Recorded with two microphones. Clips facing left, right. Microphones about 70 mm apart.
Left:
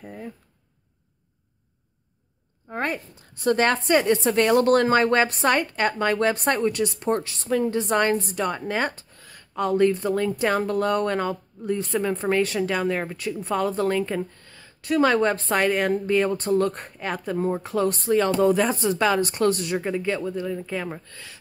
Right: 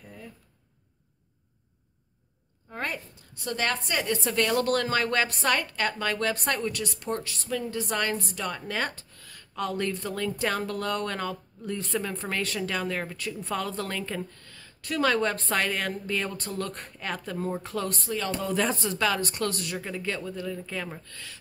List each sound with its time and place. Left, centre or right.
0.0 s speech: left
2.7 s a woman's voice: left; by 14.1 s centre
14.3 s a sound: centre
15.2 s a woman's voice: centre
18.1 s speech: left
18.5 s a woman's voice: centre
20.4 s speech: centre